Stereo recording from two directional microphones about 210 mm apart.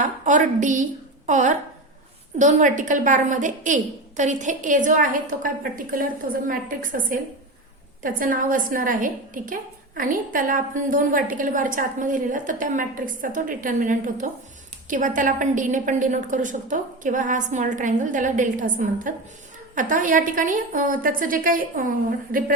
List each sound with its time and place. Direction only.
0.0 s a woman's voice: 35° right (ahead or behind)